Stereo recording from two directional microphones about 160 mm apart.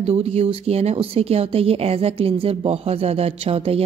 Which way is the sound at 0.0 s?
40° right (ahead or behind).